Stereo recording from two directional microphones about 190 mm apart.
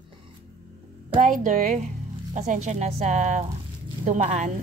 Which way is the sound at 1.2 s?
40° right (ahead or behind).